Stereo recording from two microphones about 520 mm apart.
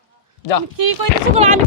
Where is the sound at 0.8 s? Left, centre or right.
Right.